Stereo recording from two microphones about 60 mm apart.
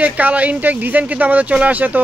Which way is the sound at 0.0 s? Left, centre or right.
Right.